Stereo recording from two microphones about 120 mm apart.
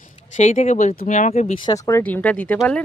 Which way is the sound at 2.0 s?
10° left (ahead or behind).